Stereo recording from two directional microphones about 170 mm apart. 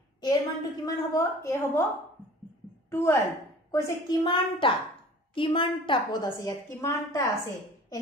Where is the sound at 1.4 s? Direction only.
15° left (ahead or behind).